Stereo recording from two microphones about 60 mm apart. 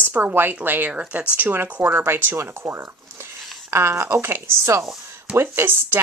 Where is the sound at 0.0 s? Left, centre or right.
Right.